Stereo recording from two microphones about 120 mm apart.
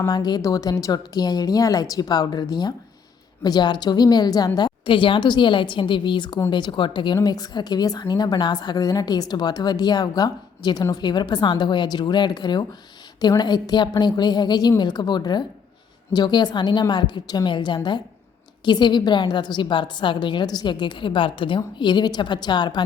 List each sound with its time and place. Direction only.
0.1 s a woman's voice: 35° left (ahead or behind)